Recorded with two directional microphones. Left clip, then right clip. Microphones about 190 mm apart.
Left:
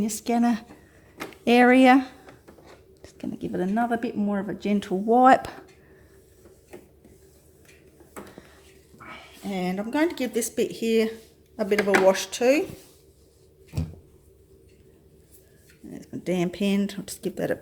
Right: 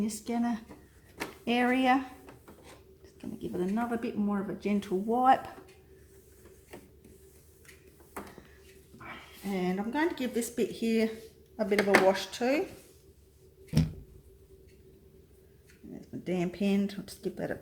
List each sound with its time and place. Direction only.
0.0 s speech: 50° left (ahead or behind)
9.6 s speech: 50° left (ahead or behind); by 12.6 s 35° left (ahead or behind)
15.9 s speech: 35° left (ahead or behind)